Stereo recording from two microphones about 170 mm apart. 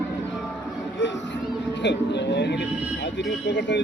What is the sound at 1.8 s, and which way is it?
Speech, 90° left.